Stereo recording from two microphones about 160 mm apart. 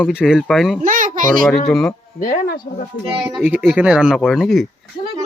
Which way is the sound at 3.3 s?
10° right (ahead or behind).